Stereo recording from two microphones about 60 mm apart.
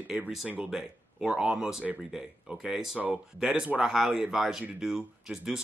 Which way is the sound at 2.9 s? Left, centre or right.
Centre.